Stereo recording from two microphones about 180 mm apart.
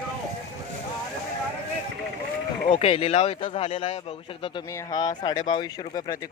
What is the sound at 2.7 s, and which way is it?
Speech, 30° left (ahead or behind).